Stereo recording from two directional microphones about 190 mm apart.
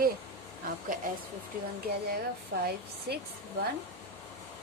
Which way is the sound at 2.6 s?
55° right (ahead or behind).